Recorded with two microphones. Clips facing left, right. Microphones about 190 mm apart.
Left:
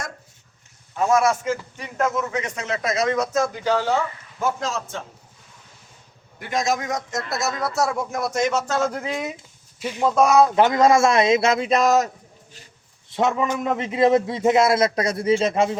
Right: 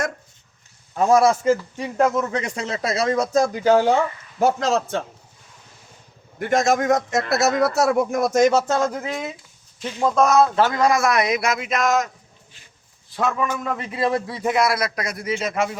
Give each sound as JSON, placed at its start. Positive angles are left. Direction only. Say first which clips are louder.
{"t": 0.9, "sound": "speech", "louder": "right 3 dB", "side_deg": -35}
{"t": 4.4, "sound": "a man's voice", "louder": "right 6 dB", "side_deg": -70}
{"t": 6.4, "sound": "a man's voice", "louder": "right 5 dB", "side_deg": -50}
{"t": 8.3, "sound": "speech", "louder": "right 6 dB", "side_deg": -40}
{"t": 8.9, "sound": "speech", "louder": "even", "side_deg": -5}
{"t": 9.8, "sound": "a man's voice", "louder": "even", "side_deg": 10}
{"t": 13.1, "sound": "a man's voice", "louder": "left 2 dB", "side_deg": 20}